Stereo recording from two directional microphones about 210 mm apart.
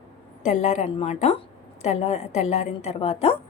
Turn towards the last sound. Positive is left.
turn(degrees=30)  # may be behind; listen again after turning